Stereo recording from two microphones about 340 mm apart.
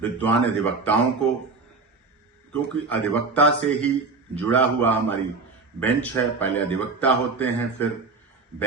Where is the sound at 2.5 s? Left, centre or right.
Centre.